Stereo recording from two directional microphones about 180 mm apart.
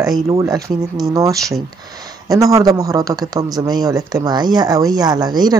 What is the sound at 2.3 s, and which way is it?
Speech, 20° right (ahead or behind).